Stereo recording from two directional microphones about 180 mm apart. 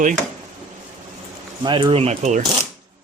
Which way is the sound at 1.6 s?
25° right (ahead or behind).